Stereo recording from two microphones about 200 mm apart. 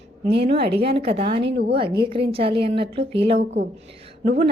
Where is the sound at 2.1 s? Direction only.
25° right (ahead or behind).